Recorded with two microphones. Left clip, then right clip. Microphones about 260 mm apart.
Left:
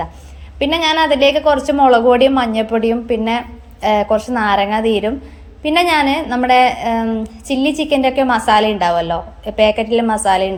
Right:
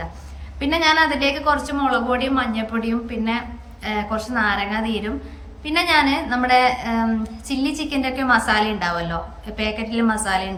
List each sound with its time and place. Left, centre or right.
0.6 s a woman's voice: centre